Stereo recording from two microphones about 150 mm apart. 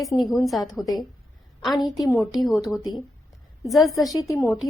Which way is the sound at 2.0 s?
Centre (ahead or behind).